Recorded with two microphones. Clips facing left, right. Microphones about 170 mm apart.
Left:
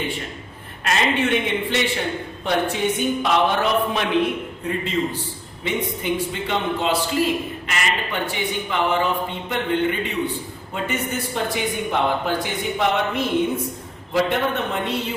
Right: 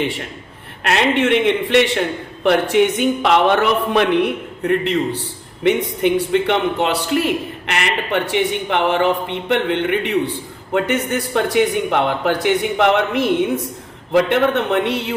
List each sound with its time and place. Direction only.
0.9 s a man's voice: 65° right (ahead or behind)